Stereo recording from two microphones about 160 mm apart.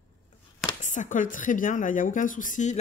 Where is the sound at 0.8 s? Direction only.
50° left (ahead or behind).